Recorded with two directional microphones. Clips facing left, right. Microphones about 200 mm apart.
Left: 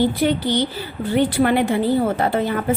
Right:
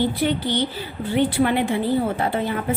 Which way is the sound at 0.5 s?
40° left (ahead or behind).